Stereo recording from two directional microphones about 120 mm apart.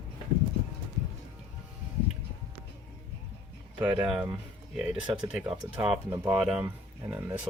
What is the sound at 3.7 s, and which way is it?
Speech, 10° right (ahead or behind).